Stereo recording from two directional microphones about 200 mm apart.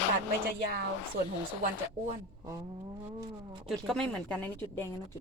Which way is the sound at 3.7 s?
Centre (ahead or behind).